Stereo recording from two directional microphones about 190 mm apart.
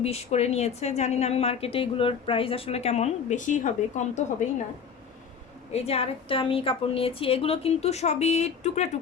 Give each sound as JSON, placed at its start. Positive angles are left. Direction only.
{"t": 0.0, "sound": "a woman's voice", "side_deg": 35}
{"t": 5.7, "sound": "a woman's voice", "side_deg": 35}